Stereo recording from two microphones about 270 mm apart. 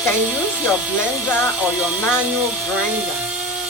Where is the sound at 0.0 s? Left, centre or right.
Centre.